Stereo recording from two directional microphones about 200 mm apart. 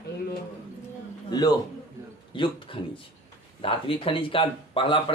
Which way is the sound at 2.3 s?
25° left (ahead or behind).